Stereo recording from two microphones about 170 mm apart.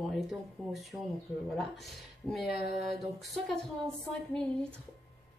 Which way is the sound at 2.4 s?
65° left (ahead or behind).